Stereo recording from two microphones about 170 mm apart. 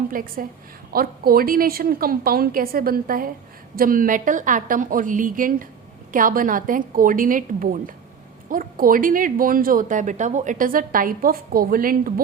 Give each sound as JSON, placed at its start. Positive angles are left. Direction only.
{"t": 0.1, "sound": "a woman's voice", "side_deg": -55}